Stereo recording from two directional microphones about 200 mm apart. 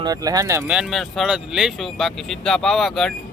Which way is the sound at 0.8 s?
Centre (ahead or behind).